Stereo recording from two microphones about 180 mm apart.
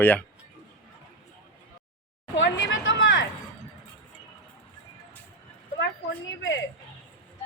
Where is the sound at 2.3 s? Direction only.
90° left.